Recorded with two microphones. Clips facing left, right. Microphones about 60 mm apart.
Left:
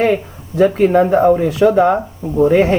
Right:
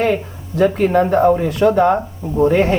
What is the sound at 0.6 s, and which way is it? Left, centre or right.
Speech, centre.